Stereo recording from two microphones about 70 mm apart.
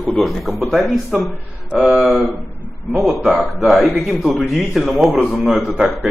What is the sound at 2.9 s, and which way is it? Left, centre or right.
A man's voice, centre.